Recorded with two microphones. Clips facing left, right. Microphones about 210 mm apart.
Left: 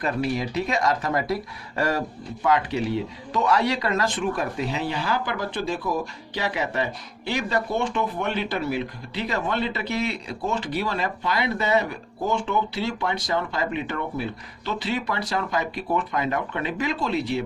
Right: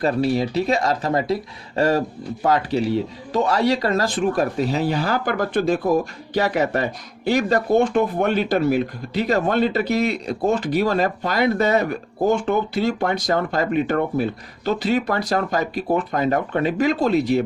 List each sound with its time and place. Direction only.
0.0 s speech: 30° right (ahead or behind)